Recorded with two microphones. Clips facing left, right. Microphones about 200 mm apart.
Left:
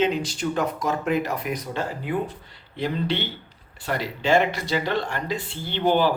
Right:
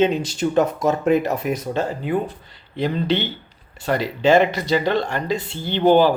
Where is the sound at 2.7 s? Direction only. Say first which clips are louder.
Right 5 dB; 90° right.